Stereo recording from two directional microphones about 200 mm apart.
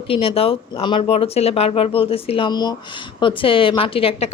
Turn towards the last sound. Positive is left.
turn(degrees=30)  # may be behind; listen again after turning